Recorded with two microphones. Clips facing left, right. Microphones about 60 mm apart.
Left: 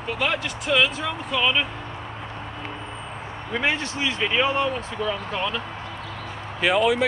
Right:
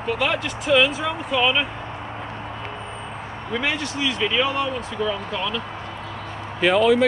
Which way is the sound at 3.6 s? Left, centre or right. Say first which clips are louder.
Left 1 dB; left.